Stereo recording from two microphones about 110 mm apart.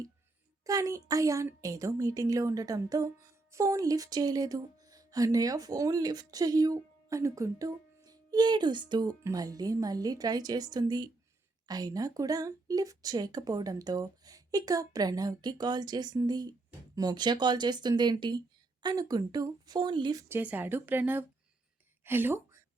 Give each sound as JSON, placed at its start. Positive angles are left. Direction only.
{"t": 0.6, "sound": "a woman's voice", "side_deg": -30}
{"t": 20.2, "sound": "a woman's voice", "side_deg": -15}